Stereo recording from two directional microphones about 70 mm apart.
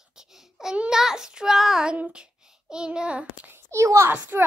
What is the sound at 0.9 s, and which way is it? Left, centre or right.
Child singing, centre.